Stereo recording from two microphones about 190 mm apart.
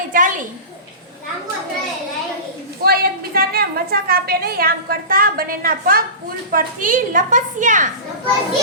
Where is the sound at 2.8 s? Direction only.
55° right (ahead or behind).